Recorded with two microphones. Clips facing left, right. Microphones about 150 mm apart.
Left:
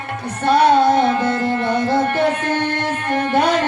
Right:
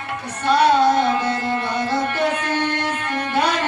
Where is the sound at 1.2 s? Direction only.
55° left (ahead or behind).